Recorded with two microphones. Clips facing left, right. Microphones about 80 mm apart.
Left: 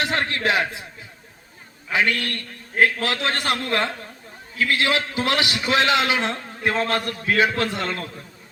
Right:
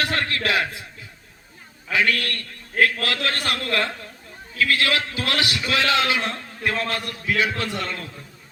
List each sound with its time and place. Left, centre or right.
0.0 s a man's voice: left
1.9 s a man's voice: left
6.9 s a man's voice: left